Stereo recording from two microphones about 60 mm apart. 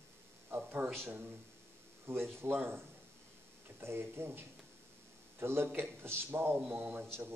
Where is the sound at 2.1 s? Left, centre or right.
Right.